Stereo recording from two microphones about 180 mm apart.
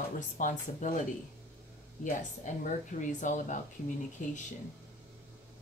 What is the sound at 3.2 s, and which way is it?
A woman's voice, 45° left (ahead or behind).